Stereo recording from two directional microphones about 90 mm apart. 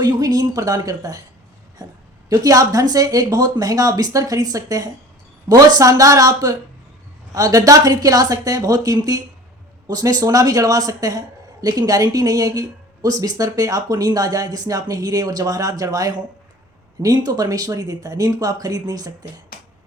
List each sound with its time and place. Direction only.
0.0 s speech: 45° right (ahead or behind)
2.3 s speech: 40° right (ahead or behind)